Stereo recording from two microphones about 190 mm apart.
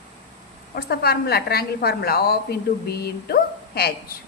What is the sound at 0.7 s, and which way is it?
A woman's voice, 55° left (ahead or behind).